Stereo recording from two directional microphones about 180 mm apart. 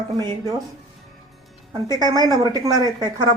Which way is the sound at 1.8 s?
20° right (ahead or behind).